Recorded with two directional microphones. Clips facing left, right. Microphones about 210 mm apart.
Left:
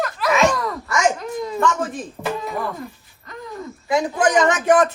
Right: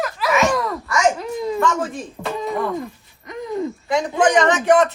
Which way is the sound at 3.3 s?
20° right (ahead or behind).